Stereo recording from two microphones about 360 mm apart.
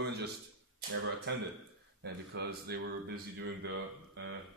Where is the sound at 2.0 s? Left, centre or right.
Right.